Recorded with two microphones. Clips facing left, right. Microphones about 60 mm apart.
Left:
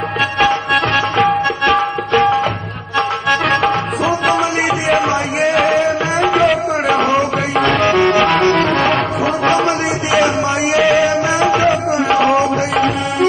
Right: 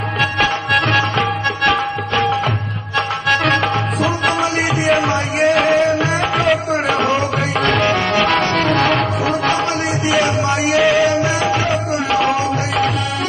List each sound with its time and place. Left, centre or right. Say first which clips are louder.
0.4 s music: left 4 dB; centre
10.1 s music: left 3 dB; centre